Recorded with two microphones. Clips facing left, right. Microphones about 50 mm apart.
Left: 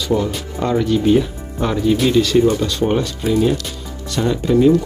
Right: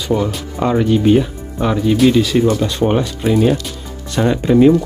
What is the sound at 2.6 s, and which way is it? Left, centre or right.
Speech, right.